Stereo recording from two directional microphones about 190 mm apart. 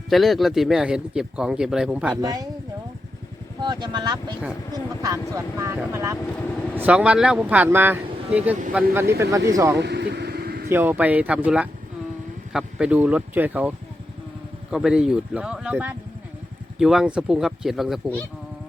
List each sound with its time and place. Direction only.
0.1 s speech: centre (ahead or behind)
2.2 s speech: 20° right (ahead or behind)
3.6 s speech: 25° right (ahead or behind)
9.7 s vehicle: 60° right (ahead or behind)
10.7 s speech: 10° right (ahead or behind)